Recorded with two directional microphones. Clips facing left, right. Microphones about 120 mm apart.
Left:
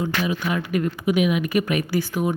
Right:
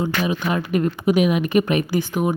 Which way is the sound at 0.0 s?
25° right (ahead or behind).